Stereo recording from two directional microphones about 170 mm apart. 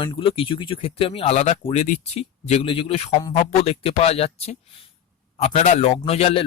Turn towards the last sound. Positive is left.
turn(degrees=35)  # may be behind; listen again after turning